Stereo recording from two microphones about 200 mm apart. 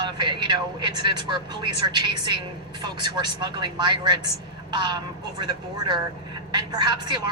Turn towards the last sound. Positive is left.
turn(degrees=-20)  # may be behind; listen again after turning